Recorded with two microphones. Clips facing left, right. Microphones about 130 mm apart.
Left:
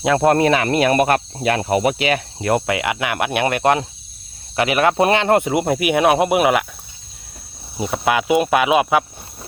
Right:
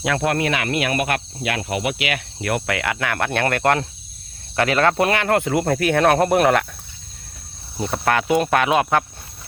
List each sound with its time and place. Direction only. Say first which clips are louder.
0.0 s speech: left 6 dB; 25° left (ahead or behind); by 6.7 s 10° left (ahead or behind)
7.8 s speech: left 2 dB; 5° left (ahead or behind)